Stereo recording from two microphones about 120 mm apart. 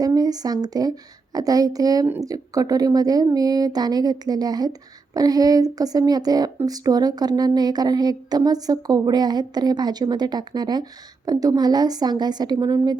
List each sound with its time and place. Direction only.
0.0 s a woman's voice: 30° right (ahead or behind)